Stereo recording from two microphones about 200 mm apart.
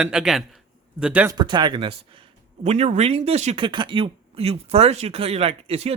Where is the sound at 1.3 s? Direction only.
20° right (ahead or behind).